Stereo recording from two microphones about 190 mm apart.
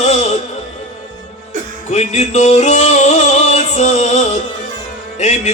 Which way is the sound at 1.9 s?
35° left (ahead or behind).